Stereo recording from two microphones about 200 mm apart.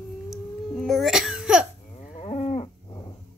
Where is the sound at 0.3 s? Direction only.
Centre (ahead or behind).